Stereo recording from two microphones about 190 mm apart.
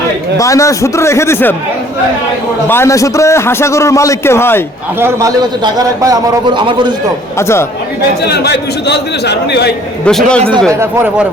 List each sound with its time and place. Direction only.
0.3 s a man's voice: 15° left (ahead or behind)
2.6 s a man's voice: 15° left (ahead or behind)
4.9 s a man's voice: 15° right (ahead or behind)
7.3 s a man's voice: 15° left (ahead or behind)
8.3 s a man's voice: 60° left (ahead or behind)
10.1 s speech: 5° left (ahead or behind)
10.7 s speech: 10° right (ahead or behind)